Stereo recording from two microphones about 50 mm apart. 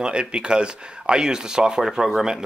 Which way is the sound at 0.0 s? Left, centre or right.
Centre.